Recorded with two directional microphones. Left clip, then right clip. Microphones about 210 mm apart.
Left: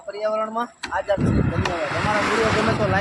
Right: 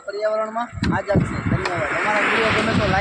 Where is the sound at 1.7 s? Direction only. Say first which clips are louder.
Right 3 dB; 55° left (ahead or behind).